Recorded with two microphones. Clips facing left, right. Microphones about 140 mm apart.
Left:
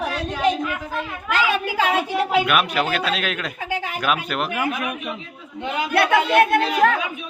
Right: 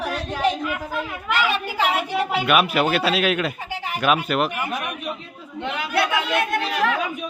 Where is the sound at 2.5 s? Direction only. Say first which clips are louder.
Right 2 dB; 5° right (ahead or behind).